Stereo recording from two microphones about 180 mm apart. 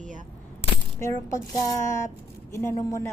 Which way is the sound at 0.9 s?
15° left (ahead or behind).